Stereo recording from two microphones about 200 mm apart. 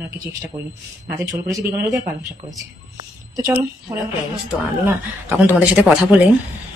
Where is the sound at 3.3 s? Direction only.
10° right (ahead or behind).